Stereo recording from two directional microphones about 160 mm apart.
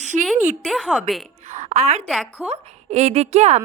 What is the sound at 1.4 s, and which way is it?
Speech, 50° right (ahead or behind).